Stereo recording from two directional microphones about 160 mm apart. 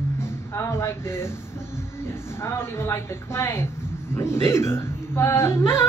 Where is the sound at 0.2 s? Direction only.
15° left (ahead or behind).